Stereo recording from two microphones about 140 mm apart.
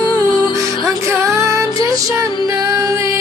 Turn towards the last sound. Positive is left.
turn(degrees=-20)  # may be behind; listen again after turning